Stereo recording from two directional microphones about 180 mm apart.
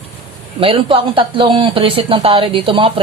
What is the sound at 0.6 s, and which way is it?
Speech, 30° right (ahead or behind).